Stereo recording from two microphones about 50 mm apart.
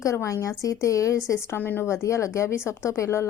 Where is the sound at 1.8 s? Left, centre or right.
Left.